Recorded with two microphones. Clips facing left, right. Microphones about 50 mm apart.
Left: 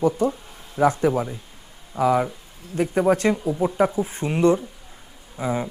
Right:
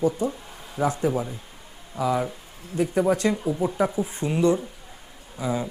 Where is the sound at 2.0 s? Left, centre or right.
Left.